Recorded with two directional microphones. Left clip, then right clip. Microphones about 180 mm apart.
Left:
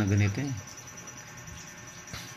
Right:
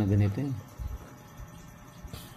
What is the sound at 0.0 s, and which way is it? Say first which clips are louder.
Speech: left 1 dB; 10° right (ahead or behind).